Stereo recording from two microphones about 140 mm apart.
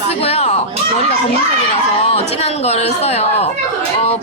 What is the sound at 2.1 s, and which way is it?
A woman's voice, 50° left (ahead or behind).